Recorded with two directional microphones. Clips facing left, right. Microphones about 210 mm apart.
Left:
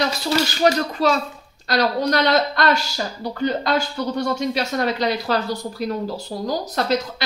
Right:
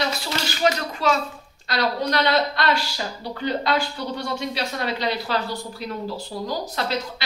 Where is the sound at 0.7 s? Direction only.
35° left (ahead or behind).